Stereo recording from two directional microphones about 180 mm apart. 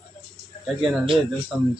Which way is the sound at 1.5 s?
Centre (ahead or behind).